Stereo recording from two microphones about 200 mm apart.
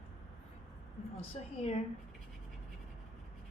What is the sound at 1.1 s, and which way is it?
Speech, 30° left (ahead or behind).